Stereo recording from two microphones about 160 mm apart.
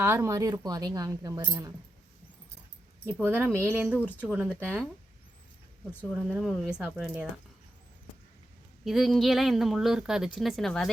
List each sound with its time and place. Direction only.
0.0 s speech: 15° right (ahead or behind)
3.2 s speech: 10° right (ahead or behind)
3.9 s speech: 10° left (ahead or behind)
4.2 s speech: 10° right (ahead or behind)
6.1 s a woman's voice: centre (ahead or behind)
8.8 s a woman's voice: centre (ahead or behind)